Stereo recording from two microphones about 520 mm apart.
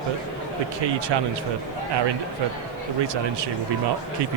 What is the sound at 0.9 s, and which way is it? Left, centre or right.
Speech, right.